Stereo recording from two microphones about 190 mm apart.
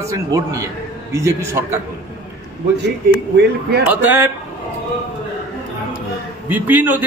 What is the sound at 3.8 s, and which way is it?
Speech, 10° right (ahead or behind).